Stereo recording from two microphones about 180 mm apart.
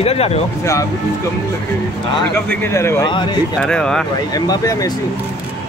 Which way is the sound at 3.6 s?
5° left (ahead or behind).